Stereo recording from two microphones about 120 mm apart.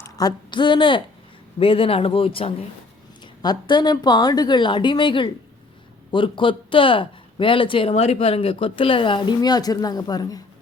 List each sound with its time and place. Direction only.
0.0 s a woman's voice: 30° left (ahead or behind); by 2.6 s 50° left (ahead or behind)
3.4 s a woman's voice: 35° left (ahead or behind)